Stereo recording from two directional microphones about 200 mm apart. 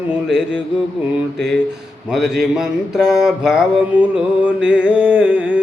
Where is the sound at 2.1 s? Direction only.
Centre (ahead or behind).